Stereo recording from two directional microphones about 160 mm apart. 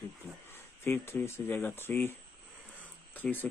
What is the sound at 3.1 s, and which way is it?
Speech, 10° left (ahead or behind).